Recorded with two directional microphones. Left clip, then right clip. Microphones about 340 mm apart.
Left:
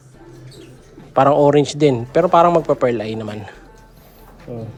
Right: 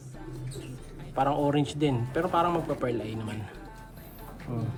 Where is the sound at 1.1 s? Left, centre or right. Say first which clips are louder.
Left 14 dB; centre.